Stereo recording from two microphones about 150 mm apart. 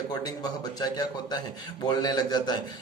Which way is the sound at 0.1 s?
25° left (ahead or behind).